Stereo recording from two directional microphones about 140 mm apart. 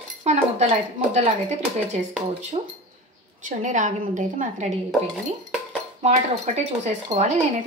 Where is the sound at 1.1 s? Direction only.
55° right (ahead or behind).